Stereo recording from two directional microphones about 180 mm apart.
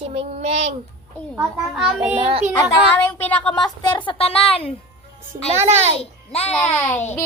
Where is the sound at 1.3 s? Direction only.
5° right (ahead or behind).